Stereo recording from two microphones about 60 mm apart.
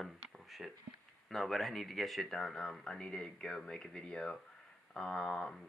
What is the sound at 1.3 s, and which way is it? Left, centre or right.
Speech, centre.